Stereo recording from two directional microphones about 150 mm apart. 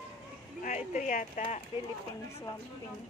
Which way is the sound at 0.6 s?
55° left (ahead or behind).